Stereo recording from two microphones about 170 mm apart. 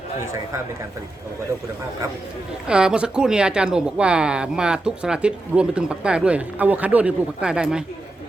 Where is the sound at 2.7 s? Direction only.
5° right (ahead or behind).